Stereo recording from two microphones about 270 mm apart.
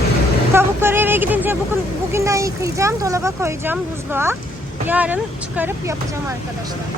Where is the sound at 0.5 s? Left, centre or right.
Centre.